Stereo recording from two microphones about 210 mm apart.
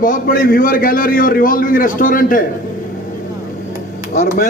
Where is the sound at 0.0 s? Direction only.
40° left (ahead or behind).